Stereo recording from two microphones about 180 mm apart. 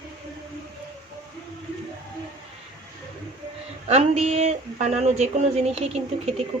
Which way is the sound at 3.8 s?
35° right (ahead or behind).